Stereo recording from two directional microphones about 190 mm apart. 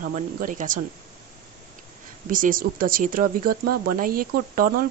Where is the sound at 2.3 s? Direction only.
45° right (ahead or behind).